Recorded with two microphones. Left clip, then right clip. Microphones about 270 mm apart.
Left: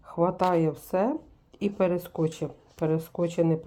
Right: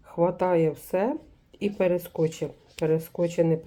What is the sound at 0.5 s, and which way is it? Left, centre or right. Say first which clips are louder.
Speech: right 2 dB; left.